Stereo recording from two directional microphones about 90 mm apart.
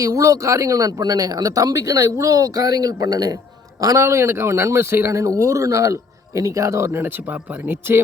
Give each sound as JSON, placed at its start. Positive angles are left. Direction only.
{"t": 0.0, "sound": "speech", "side_deg": -40}